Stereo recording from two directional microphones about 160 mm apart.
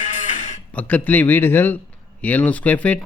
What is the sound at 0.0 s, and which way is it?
Music, 50° left (ahead or behind).